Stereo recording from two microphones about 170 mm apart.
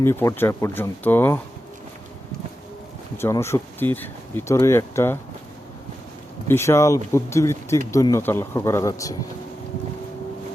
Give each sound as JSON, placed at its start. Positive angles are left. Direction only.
{"t": 0.0, "sound": "speech", "side_deg": 15}
{"t": 3.2, "sound": "speech", "side_deg": 15}
{"t": 6.5, "sound": "speech", "side_deg": 15}